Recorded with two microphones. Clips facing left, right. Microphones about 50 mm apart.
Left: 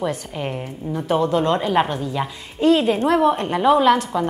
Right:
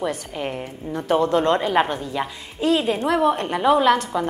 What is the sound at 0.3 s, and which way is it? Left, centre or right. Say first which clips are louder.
Speech: left 1 dB; centre.